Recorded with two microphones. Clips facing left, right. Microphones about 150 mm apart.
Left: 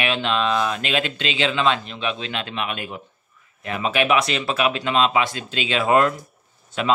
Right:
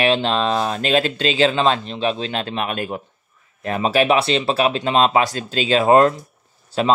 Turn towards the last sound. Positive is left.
turn(degrees=-35)  # may be behind; listen again after turning